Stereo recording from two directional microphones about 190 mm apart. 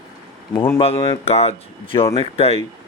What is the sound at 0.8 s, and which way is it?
Speech, 30° left (ahead or behind).